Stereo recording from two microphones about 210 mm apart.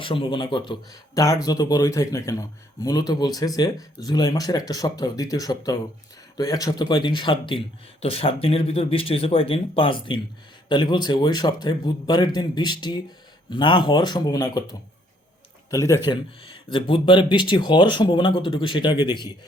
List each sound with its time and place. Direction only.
0.0 s speech: 25° left (ahead or behind)